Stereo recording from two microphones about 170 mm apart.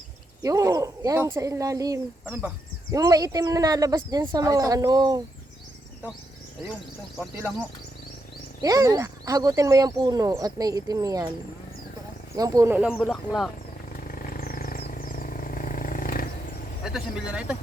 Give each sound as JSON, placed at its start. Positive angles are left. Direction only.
{"t": 0.4, "sound": "speech", "side_deg": -20}
{"t": 8.6, "sound": "speech", "side_deg": -20}
{"t": 12.4, "sound": "speech", "side_deg": -20}
{"t": 13.0, "sound": "speech", "side_deg": 0}
{"t": 13.9, "sound": "vehicle", "side_deg": 55}
{"t": 16.8, "sound": "speech", "side_deg": -5}